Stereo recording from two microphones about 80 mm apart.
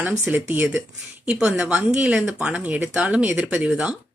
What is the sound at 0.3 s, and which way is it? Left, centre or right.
Speech, right.